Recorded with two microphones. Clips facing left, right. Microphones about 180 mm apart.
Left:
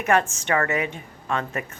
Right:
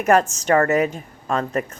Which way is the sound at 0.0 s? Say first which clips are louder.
Right 5 dB; 40° right (ahead or behind).